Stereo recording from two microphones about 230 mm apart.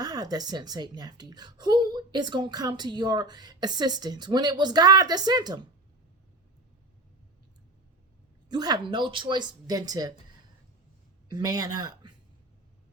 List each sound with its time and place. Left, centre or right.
0.0 s a woman's voice: centre
8.4 s a woman's voice: centre
11.3 s speech: centre